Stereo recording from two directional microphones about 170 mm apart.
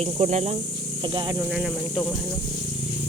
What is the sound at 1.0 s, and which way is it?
Speech, 25° right (ahead or behind).